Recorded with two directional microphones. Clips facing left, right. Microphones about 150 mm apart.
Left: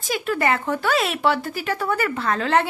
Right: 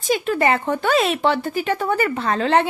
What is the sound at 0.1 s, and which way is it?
Speech, 25° right (ahead or behind).